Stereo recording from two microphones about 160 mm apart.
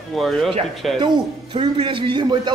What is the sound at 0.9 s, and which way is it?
A man's voice, 30° right (ahead or behind).